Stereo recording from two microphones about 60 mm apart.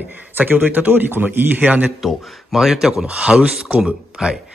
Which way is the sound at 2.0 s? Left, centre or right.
Centre.